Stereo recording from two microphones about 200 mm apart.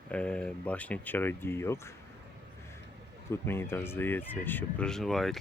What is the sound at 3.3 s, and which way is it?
Speech, 10° left (ahead or behind).